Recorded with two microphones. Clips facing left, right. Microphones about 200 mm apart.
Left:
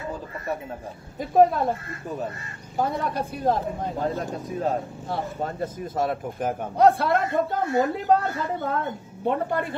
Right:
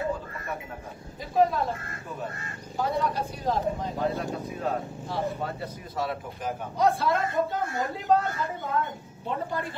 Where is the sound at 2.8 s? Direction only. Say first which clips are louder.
Left 2 dB; 55° left (ahead or behind).